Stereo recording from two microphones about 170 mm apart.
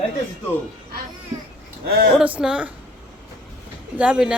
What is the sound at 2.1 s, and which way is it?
Speech, 5° right (ahead or behind).